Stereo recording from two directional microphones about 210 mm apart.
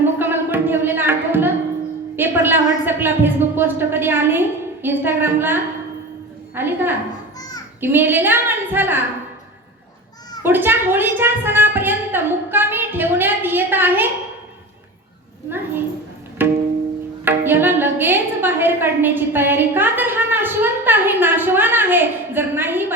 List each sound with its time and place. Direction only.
0.0 s music: 10° right (ahead or behind)
2.1 s a woman's voice: 10° right (ahead or behind)
10.4 s speech: 10° right (ahead or behind)
15.4 s speech: 10° right (ahead or behind)
16.4 s music: 10° right (ahead or behind)
17.2 s speech: 10° right (ahead or behind)